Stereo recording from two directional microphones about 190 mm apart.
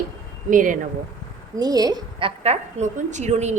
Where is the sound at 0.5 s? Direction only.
45° right (ahead or behind).